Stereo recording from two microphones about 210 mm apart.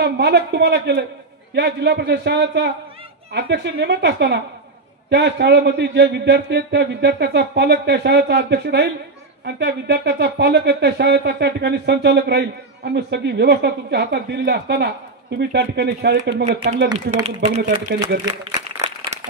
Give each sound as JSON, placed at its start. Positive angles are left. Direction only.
{"t": 0.0, "sound": "speech", "side_deg": -55}
{"t": 16.4, "sound": "speech", "side_deg": -30}